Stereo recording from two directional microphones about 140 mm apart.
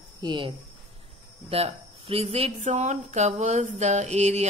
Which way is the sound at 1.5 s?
45° right (ahead or behind).